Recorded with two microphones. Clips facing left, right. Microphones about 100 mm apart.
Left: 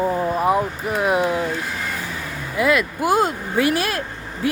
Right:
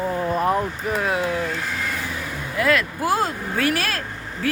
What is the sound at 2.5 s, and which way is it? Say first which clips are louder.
Speech: left 2 dB; 15° left (ahead or behind).